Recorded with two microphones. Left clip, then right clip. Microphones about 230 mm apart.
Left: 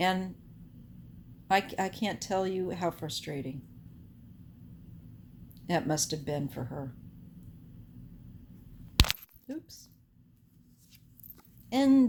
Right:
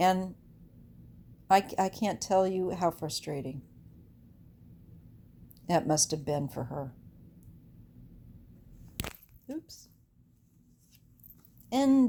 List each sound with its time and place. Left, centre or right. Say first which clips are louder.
0.0 s a woman's voice: right 3 dB; right
1.5 s a woman's voice: right 3 dB; right
5.6 s a woman's voice: right 3 dB; right
9.5 s a woman's voice: right 1 dB; right
11.7 s speech: left 1 dB; right